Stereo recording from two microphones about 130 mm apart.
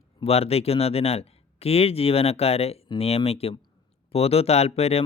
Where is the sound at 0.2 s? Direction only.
50° left (ahead or behind).